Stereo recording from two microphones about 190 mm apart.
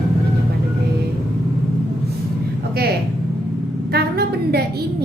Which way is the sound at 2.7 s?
55° right (ahead or behind).